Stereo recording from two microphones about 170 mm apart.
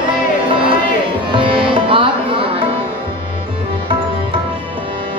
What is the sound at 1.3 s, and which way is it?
Music, 30° right (ahead or behind).